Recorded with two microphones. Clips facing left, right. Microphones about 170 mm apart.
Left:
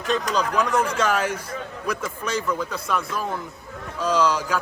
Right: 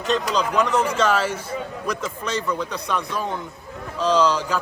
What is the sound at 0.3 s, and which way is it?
A man's voice, 10° left (ahead or behind).